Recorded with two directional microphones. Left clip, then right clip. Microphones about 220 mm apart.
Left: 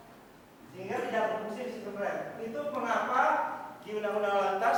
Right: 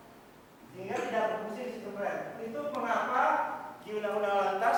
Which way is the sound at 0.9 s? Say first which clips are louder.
Even; 10° left (ahead or behind).